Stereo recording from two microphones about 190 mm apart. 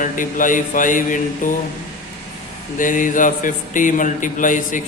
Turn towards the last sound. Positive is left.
turn(degrees=45)  # may be behind; listen again after turning